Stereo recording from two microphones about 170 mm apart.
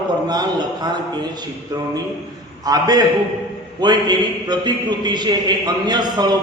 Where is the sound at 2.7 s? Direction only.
20° right (ahead or behind).